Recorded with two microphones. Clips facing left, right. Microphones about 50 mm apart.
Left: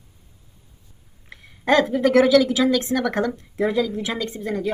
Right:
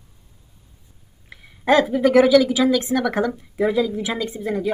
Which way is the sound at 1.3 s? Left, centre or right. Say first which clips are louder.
Right 1 dB; centre.